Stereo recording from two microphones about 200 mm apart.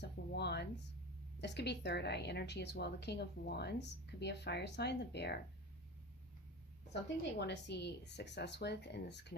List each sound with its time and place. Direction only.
0.0 s a sound: 55° left (ahead or behind)
1.4 s a woman's voice: 55° left (ahead or behind)
7.3 s a woman's voice: 60° left (ahead or behind)